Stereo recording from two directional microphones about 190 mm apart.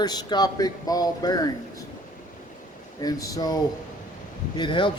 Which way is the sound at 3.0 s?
20° left (ahead or behind).